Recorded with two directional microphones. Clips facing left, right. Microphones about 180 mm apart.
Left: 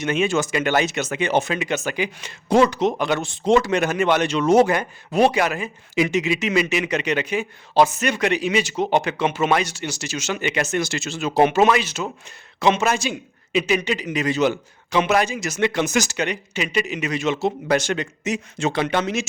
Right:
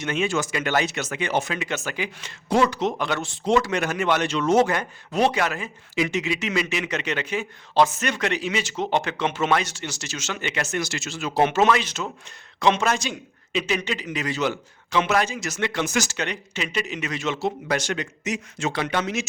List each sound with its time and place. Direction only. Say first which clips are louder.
0.0 s speech: left 4 dB; 20° left (ahead or behind)